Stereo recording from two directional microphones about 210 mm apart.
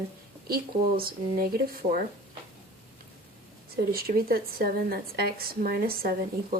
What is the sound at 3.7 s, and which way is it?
A woman's voice, 45° right (ahead or behind).